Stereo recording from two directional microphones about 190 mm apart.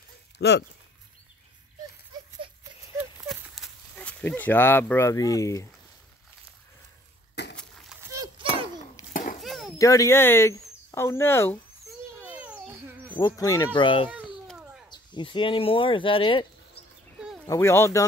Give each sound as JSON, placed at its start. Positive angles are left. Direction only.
{"t": 0.4, "sound": "speech", "side_deg": 60}
{"t": 3.3, "sound": "a sound", "side_deg": 0}
{"t": 7.4, "sound": "a sound", "side_deg": 65}
{"t": 8.0, "sound": "dog", "side_deg": -20}
{"t": 9.1, "sound": "a sound", "side_deg": 45}
{"t": 9.4, "sound": "a sound", "side_deg": 0}
{"t": 9.8, "sound": "speech", "side_deg": 15}
{"t": 12.2, "sound": "dog", "side_deg": -5}
{"t": 13.1, "sound": "speech", "side_deg": 20}
{"t": 14.1, "sound": "babbling", "side_deg": -5}
{"t": 14.9, "sound": "speech", "side_deg": 25}
{"t": 17.5, "sound": "speech", "side_deg": 15}